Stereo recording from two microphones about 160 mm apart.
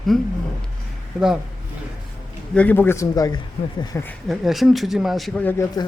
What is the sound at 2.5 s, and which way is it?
Speech, 10° left (ahead or behind).